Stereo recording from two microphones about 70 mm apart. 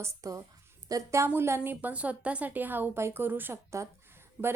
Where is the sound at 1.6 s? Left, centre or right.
Right.